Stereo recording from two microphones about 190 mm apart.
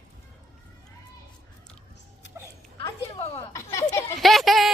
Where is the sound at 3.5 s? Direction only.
15° left (ahead or behind).